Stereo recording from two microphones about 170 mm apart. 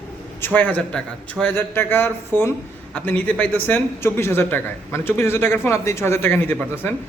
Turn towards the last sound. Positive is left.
turn(degrees=10)  # may be behind; listen again after turning